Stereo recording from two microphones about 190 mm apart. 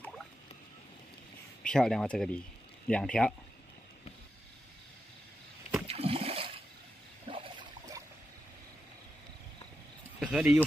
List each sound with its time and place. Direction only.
1.6 s speech: 5° left (ahead or behind)
5.9 s splash: 30° right (ahead or behind)
7.2 s a sound: 25° right (ahead or behind)
10.2 s speech: 5° right (ahead or behind)